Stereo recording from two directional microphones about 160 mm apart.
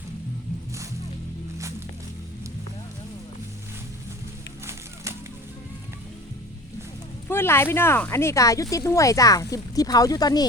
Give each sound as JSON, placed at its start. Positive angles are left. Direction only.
{"t": 7.3, "sound": "speech", "side_deg": 15}